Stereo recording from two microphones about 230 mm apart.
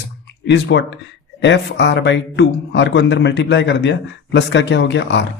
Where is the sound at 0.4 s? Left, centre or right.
Left.